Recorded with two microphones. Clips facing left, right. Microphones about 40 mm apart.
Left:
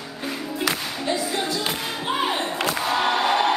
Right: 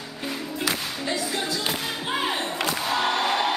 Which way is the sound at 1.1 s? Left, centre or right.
Centre.